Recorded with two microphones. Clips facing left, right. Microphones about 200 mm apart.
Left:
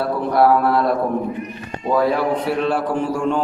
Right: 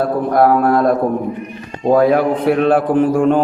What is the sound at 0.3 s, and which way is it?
Mantra, 50° right (ahead or behind).